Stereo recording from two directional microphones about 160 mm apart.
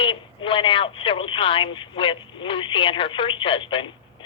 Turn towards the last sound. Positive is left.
turn(degrees=30)  # may be behind; listen again after turning